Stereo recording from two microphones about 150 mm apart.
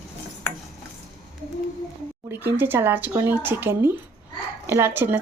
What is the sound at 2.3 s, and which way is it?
Speech, 15° right (ahead or behind).